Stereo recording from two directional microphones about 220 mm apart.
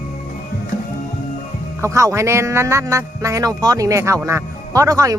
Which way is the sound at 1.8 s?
15° right (ahead or behind).